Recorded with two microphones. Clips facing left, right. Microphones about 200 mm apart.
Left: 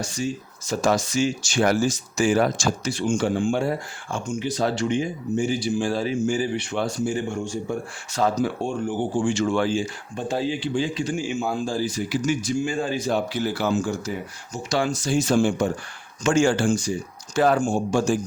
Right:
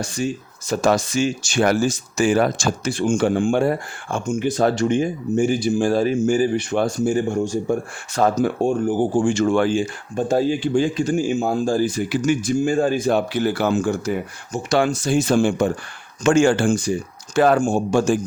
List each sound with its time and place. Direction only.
0.0 s speech: 60° right (ahead or behind)